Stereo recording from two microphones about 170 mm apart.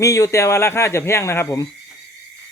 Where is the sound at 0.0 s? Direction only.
20° left (ahead or behind).